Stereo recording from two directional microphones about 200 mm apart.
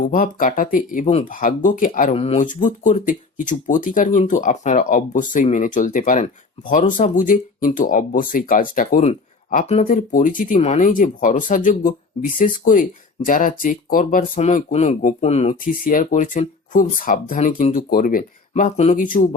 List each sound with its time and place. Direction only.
0.0 s speech: 40° left (ahead or behind)